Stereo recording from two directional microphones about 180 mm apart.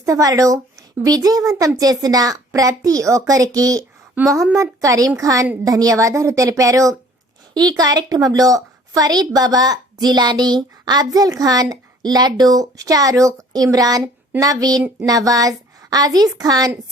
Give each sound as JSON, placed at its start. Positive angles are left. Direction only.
{"t": 0.0, "sound": "a woman's voice", "side_deg": -20}